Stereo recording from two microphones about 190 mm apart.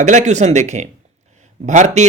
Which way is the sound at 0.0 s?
40° right (ahead or behind).